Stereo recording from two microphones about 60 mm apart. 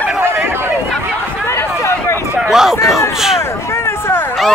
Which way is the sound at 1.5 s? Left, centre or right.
Left.